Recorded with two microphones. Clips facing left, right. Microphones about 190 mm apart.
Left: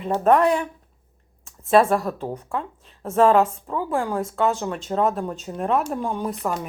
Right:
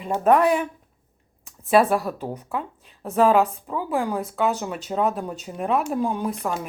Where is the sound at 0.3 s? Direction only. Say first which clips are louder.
Even; 15° right (ahead or behind).